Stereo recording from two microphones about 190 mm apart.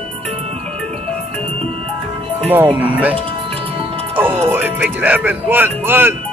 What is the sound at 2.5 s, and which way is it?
Speech, 10° right (ahead or behind).